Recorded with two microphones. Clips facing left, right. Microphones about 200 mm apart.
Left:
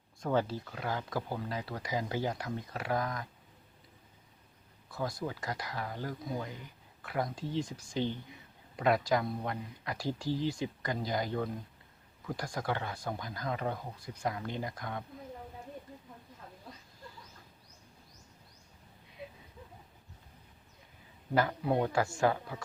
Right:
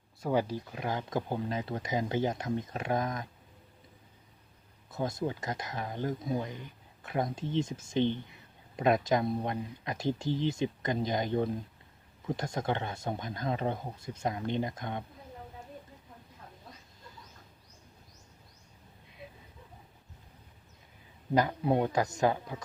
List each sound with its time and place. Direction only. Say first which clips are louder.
0.2 s speech: right 1 dB; 10° right (ahead or behind)
4.9 s speech: right 4 dB; 20° right (ahead or behind)
21.3 s speech: right 2 dB; 20° right (ahead or behind)